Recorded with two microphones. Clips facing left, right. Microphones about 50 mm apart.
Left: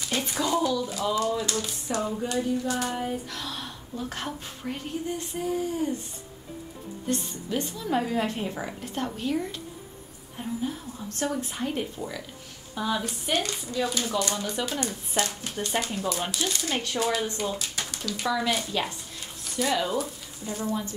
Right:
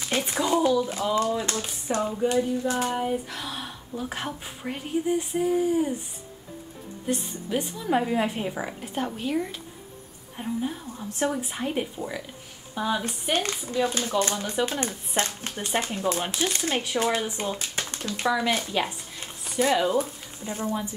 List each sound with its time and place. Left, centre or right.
0.0 s speech: right
2.0 s a woman's voice: centre
2.2 s a woman's voice: right
7.1 s a woman's voice: centre
13.3 s speech: right
18.3 s a woman's voice: centre
19.1 s a sound: right
20.0 s speech: right